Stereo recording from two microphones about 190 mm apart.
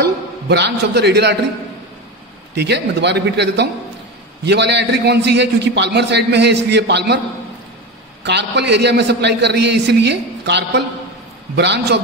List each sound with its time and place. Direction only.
0.0 s a man's voice: 60° right (ahead or behind)
2.5 s a man's voice: 60° right (ahead or behind)
8.2 s a man's voice: 65° right (ahead or behind)